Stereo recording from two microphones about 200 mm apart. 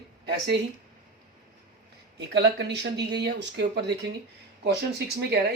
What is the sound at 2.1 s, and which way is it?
Speech, 60° right (ahead or behind).